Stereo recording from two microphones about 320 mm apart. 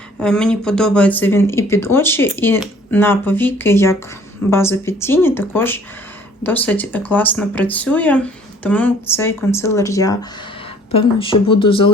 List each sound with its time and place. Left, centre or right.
0.2 s speech: centre